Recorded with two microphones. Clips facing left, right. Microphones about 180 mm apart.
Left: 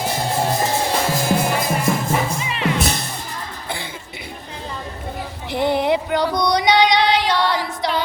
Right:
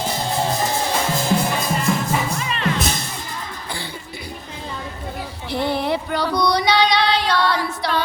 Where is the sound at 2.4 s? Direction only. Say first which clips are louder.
Even; 15° left (ahead or behind).